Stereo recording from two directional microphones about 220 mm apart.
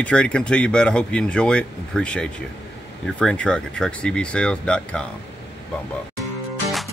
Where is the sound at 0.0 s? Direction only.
5° left (ahead or behind).